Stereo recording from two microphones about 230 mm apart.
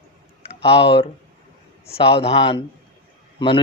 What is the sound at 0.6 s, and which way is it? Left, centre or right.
Speech, left.